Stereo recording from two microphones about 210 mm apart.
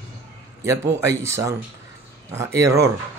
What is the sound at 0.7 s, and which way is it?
Speech, 15° right (ahead or behind).